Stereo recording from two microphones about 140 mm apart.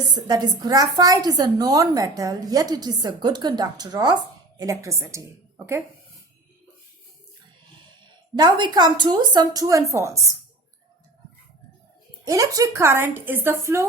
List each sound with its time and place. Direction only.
0.1 s a woman's voice: 30° right (ahead or behind)
8.4 s a woman's voice: 30° right (ahead or behind)
12.2 s a woman's voice: 25° right (ahead or behind)